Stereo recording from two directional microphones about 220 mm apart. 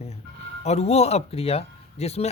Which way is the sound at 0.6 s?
30° left (ahead or behind).